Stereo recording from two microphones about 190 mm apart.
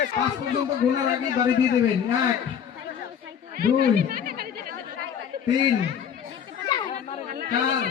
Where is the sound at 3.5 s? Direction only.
50° right (ahead or behind).